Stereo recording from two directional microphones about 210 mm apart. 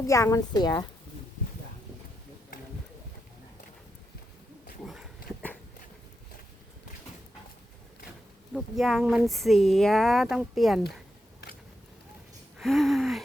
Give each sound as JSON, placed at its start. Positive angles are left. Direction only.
{"t": 0.1, "sound": "a woman's voice", "side_deg": 15}
{"t": 4.8, "sound": "dog", "side_deg": 0}
{"t": 8.5, "sound": "speech", "side_deg": 0}
{"t": 12.5, "sound": "speech", "side_deg": 0}